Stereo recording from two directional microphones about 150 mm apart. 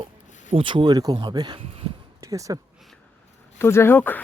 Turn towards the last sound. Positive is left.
turn(degrees=10)  # may be behind; listen again after turning